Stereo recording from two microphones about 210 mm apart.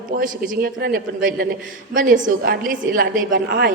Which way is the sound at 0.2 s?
45° right (ahead or behind).